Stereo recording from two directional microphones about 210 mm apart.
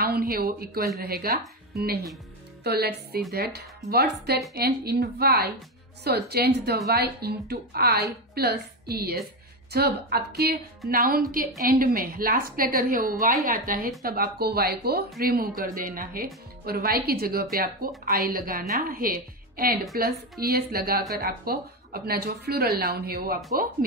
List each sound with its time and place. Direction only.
0.0 s a woman's voice: 45° right (ahead or behind)
2.6 s a woman's voice: 50° right (ahead or behind)